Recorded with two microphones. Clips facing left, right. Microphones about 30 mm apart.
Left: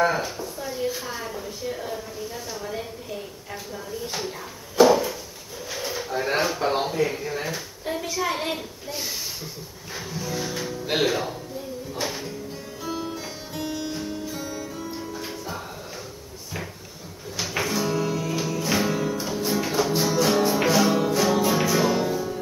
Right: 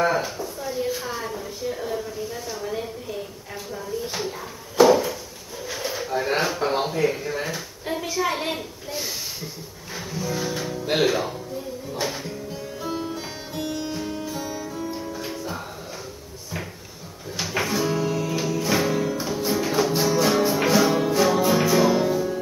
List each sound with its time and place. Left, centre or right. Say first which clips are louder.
0.0 s a sound: right 1 dB; centre
3.7 s speech: right 3 dB; centre
4.7 s a sound: right 1 dB; centre
5.7 s speech: right 2 dB; centre
12.9 s music: left 1 dB; centre
17.4 s music: right 1 dB; centre